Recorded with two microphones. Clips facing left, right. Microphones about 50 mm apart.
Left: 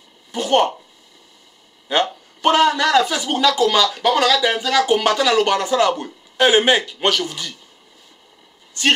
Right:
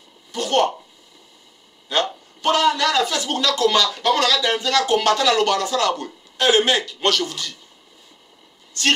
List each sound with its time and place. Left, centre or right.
0.3 s speech: left
1.9 s speech: left
8.8 s speech: centre